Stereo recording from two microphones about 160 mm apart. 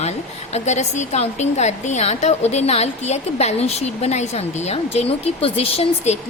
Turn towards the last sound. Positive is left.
turn(degrees=40)  # may be behind; listen again after turning